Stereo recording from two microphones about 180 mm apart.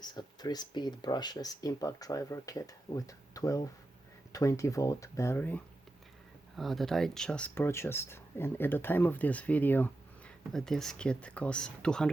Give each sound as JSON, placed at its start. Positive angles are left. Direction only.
{"t": 0.0, "sound": "speech", "side_deg": 25}